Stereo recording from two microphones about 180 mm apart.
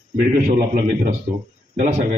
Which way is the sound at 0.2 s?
45° right (ahead or behind).